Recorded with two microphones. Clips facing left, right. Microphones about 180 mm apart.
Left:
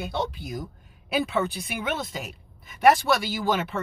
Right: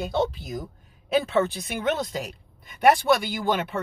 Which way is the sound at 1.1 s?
10° left (ahead or behind).